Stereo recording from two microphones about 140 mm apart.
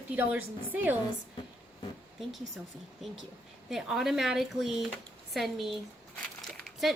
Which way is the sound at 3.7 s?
5° right (ahead or behind).